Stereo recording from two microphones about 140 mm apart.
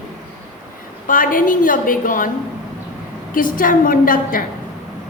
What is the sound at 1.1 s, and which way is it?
A woman's voice, 80° left.